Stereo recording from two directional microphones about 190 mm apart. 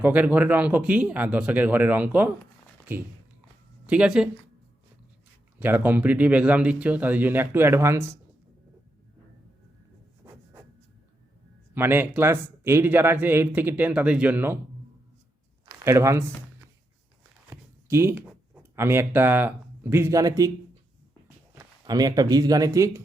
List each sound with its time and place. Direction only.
0.0 s speech: 10° right (ahead or behind)
5.5 s speech: 10° right (ahead or behind)
11.7 s speech: 10° right (ahead or behind)
15.8 s speech: 15° right (ahead or behind)
17.5 s a sound: 15° right (ahead or behind)
18.5 s speech: 10° right (ahead or behind)
21.8 s speech: 20° right (ahead or behind)